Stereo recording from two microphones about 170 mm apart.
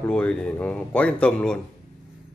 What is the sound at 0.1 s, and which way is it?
Speech, 5° left (ahead or behind).